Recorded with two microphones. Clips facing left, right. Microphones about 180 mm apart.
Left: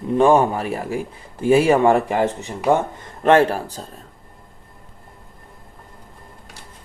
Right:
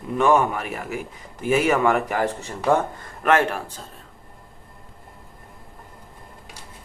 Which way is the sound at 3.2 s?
30° left (ahead or behind).